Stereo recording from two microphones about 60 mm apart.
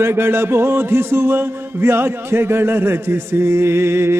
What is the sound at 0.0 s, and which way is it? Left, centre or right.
Music, right.